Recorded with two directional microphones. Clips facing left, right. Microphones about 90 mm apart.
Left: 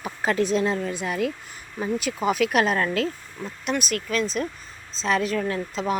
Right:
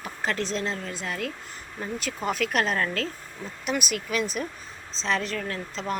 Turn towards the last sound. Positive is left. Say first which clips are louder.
# left 5 dB
turn(degrees=10)  # may be behind; listen again after turning